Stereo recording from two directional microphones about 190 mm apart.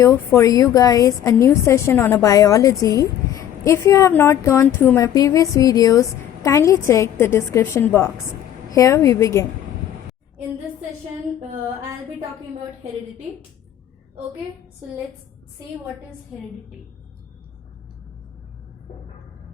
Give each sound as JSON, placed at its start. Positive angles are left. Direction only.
{"t": 0.0, "sound": "a woman's voice", "side_deg": 15}